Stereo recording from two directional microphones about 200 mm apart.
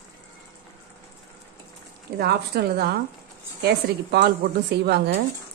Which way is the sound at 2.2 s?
50° right (ahead or behind).